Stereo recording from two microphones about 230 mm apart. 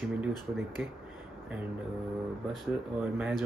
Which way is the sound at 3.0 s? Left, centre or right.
Centre.